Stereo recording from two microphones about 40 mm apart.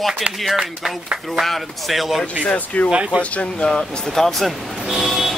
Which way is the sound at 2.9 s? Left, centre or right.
Right.